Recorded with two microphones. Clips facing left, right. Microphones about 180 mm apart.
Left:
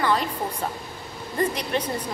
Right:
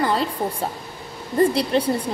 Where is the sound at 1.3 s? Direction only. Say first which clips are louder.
Right 7 dB; 35° right (ahead or behind).